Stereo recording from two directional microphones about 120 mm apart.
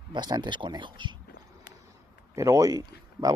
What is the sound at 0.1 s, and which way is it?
Speech, 40° right (ahead or behind).